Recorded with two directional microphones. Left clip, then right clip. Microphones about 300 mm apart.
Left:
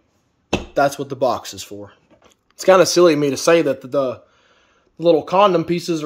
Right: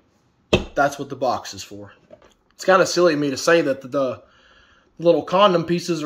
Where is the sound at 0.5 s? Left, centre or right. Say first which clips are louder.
Left 1 dB; left.